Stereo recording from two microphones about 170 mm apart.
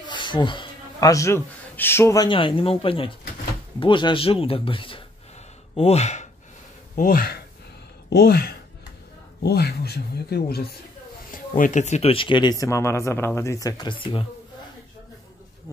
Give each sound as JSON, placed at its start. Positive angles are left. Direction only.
{"t": 0.0, "sound": "a sound", "side_deg": 25}
{"t": 2.2, "sound": "speech", "side_deg": 30}
{"t": 7.0, "sound": "speech", "side_deg": 55}
{"t": 11.3, "sound": "speech", "side_deg": 50}